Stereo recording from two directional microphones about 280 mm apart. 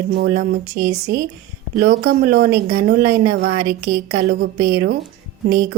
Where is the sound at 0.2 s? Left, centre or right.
Right.